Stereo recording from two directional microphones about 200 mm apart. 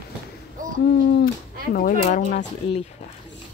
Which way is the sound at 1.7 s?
40° left (ahead or behind).